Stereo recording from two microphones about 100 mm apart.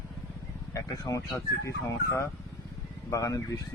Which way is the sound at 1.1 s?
35° left (ahead or behind).